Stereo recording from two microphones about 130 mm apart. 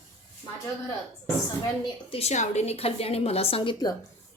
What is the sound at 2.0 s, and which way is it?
A woman's voice, 50° left (ahead or behind).